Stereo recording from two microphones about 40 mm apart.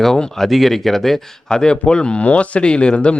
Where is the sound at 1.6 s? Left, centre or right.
Left.